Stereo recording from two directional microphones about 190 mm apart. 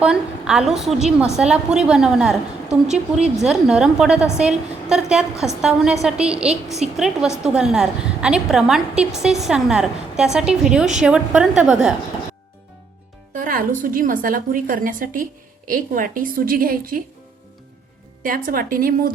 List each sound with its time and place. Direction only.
0.0 s a woman's voice: 5° right (ahead or behind)
13.3 s a woman's voice: 45° right (ahead or behind)
18.2 s a woman's voice: 50° right (ahead or behind)